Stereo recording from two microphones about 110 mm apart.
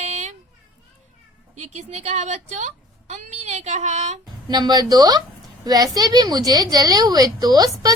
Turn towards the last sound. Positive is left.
turn(degrees=-35)  # may be behind; listen again after turning